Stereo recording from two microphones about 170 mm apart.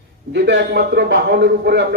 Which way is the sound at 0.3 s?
85° right.